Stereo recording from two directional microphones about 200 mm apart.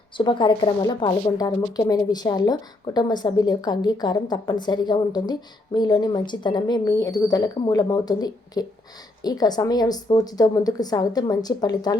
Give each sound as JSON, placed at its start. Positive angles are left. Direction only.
{"t": 0.2, "sound": "a woman's voice", "side_deg": 25}